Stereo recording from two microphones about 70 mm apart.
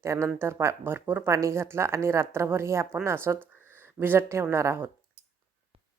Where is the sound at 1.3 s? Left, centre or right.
Right.